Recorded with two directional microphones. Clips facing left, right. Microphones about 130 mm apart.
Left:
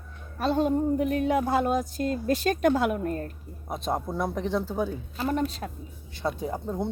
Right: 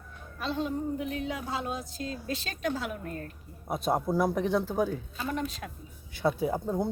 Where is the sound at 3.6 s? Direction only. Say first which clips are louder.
Right 2 dB; 5° right (ahead or behind).